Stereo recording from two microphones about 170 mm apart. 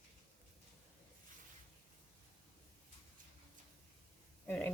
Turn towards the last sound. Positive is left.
turn(degrees=10)  # may be behind; listen again after turning